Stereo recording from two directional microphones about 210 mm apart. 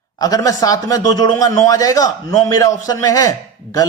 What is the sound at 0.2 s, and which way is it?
A man's voice, 15° left (ahead or behind).